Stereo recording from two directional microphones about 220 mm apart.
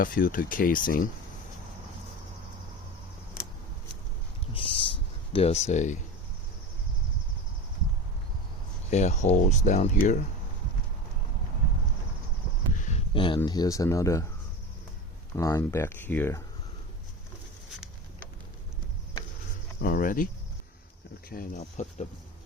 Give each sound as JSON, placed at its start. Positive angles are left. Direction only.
{"t": 0.0, "sound": "speech", "side_deg": 40}
{"t": 4.5, "sound": "a sound", "side_deg": 25}
{"t": 8.9, "sound": "speech", "side_deg": 30}
{"t": 12.7, "sound": "a sound", "side_deg": 35}
{"t": 13.1, "sound": "speech", "side_deg": 20}
{"t": 15.4, "sound": "speech", "side_deg": 15}
{"t": 19.8, "sound": "speech", "side_deg": 40}